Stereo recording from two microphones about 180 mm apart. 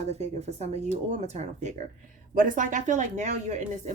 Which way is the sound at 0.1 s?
40° right (ahead or behind).